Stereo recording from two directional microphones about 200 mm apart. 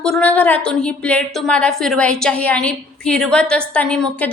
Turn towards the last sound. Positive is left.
turn(degrees=5)  # may be behind; listen again after turning